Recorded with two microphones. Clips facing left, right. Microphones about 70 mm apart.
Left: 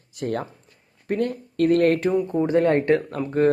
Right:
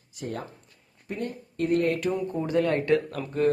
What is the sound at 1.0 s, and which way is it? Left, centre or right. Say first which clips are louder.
Speech: left 9 dB; left.